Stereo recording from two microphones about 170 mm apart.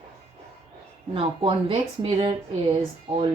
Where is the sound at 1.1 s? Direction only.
30° right (ahead or behind).